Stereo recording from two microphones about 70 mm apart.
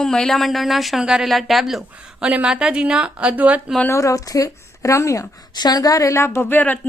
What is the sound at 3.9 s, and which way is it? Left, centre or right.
A woman's voice, left.